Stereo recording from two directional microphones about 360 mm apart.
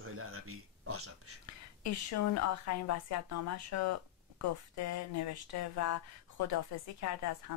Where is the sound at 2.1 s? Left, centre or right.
Left.